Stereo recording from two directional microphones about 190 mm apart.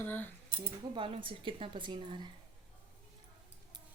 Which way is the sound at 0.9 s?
25° right (ahead or behind).